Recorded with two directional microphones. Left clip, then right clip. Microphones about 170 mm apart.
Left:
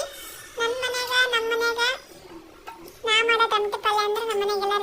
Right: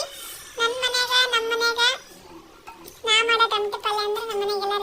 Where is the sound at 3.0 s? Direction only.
5° left (ahead or behind); by 4.8 s 20° left (ahead or behind).